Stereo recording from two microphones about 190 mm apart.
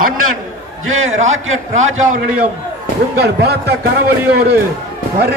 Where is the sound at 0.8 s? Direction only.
90° right.